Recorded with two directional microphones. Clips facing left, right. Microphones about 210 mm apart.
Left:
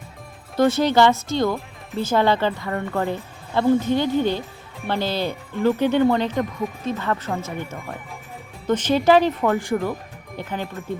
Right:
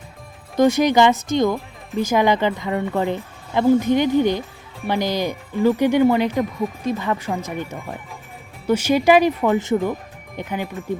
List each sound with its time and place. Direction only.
0.5 s a woman's voice: 15° right (ahead or behind)